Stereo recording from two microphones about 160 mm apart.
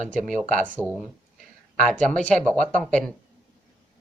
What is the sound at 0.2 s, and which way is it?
Speech, centre (ahead or behind).